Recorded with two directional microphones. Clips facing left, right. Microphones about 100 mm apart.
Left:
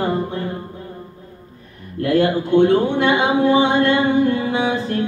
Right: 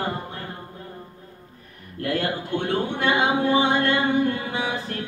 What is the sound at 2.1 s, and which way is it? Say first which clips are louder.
A man's voice: left 9 dB; 20° left (ahead or behind).